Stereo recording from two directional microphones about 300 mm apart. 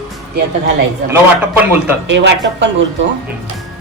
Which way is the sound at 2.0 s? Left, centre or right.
Right.